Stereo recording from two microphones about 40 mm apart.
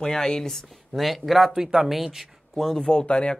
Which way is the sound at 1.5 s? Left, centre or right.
Centre.